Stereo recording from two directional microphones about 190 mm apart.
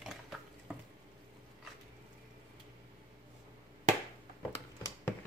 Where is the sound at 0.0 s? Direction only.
Centre (ahead or behind).